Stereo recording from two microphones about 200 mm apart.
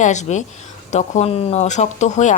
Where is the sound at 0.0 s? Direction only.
35° left (ahead or behind).